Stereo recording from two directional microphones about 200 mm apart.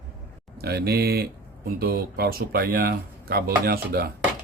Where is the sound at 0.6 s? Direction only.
50° right (ahead or behind).